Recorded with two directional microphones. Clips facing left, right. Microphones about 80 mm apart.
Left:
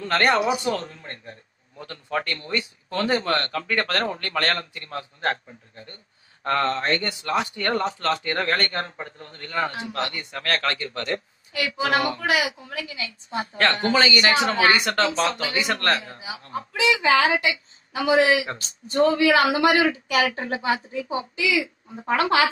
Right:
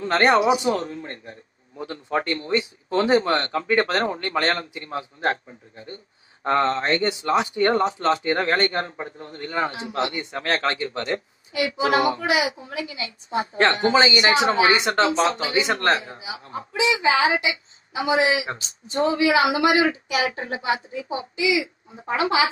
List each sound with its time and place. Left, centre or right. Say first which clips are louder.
0.0 s speech: right 3 dB; right
12.4 s speech: right 2 dB; right; by 21.6 s centre